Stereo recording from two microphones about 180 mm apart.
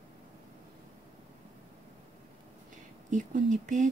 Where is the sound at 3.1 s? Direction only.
45° right (ahead or behind).